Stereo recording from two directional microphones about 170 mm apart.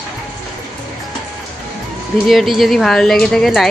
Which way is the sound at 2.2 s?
Centre (ahead or behind).